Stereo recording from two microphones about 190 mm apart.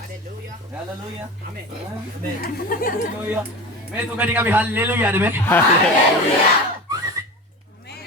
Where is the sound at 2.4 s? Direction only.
50° left (ahead or behind).